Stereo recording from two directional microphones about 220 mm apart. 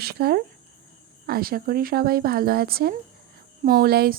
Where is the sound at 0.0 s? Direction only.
45° right (ahead or behind).